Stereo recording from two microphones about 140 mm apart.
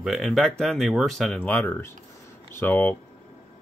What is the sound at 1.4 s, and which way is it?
Speech, 15° left (ahead or behind).